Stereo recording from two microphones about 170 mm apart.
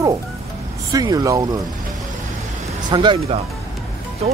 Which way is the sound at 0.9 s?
20° right (ahead or behind).